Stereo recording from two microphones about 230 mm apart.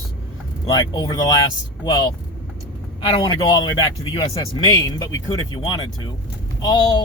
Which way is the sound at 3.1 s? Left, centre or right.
Centre.